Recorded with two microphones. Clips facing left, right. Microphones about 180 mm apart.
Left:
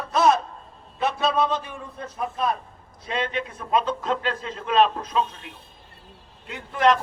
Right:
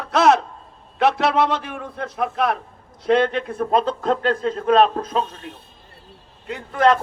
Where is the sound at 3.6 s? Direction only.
40° right (ahead or behind).